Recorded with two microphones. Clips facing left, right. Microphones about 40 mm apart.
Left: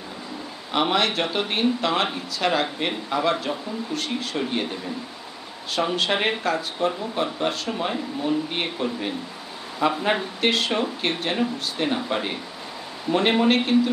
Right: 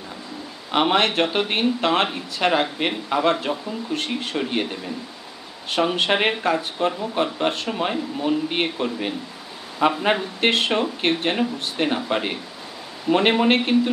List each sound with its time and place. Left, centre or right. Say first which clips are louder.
0.7 s a man's voice: right 3 dB; centre
5.8 s speech: right 3 dB; right